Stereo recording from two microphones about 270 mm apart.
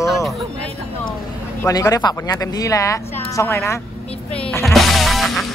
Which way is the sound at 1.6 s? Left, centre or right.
Centre.